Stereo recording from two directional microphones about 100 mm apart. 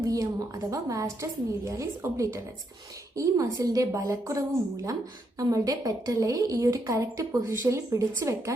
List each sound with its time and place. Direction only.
0.0 s a woman's voice: 35° right (ahead or behind)